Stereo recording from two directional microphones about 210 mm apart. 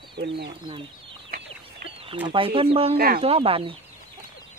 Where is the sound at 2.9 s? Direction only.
45° right (ahead or behind).